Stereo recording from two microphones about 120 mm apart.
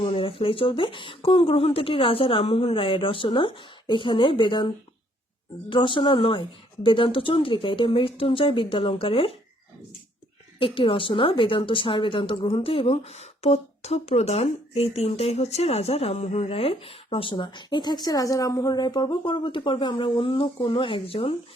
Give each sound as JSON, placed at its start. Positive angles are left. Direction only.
{"t": 0.0, "sound": "a woman's voice", "side_deg": 50}
{"t": 10.6, "sound": "a woman's voice", "side_deg": 45}